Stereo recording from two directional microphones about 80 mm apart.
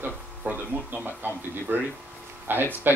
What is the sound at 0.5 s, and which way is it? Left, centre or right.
Speech, right.